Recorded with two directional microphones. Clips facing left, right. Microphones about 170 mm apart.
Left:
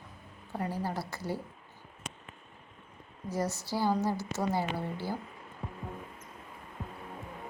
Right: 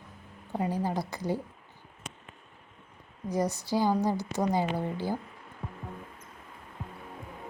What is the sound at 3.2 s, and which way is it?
A woman's voice, 15° right (ahead or behind).